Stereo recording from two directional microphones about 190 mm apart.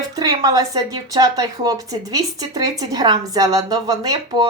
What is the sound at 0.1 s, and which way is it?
A woman's voice, 20° right (ahead or behind).